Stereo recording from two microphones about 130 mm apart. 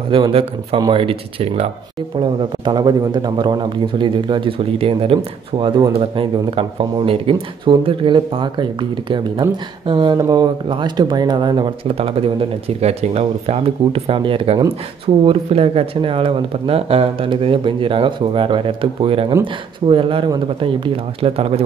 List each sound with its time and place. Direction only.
0.1 s speech: 45° right (ahead or behind)
2.1 s speech: 35° right (ahead or behind)
5.9 s speech: 45° right (ahead or behind)